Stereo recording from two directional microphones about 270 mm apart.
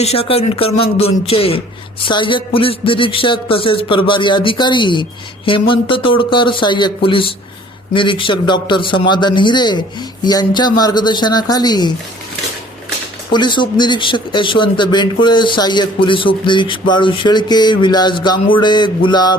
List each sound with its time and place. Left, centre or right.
0.0 s a man's voice: left
13.3 s a man's voice: centre